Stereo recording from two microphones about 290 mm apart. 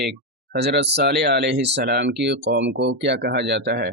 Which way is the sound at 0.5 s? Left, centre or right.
Right.